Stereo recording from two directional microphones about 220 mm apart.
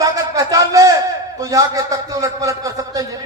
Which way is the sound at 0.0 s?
15° right (ahead or behind).